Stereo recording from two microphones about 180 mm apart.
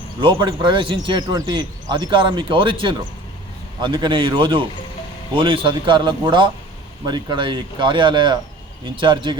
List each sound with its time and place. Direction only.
0.2 s speech: 25° right (ahead or behind)